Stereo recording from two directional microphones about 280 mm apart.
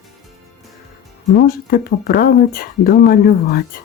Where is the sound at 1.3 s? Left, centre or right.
Left.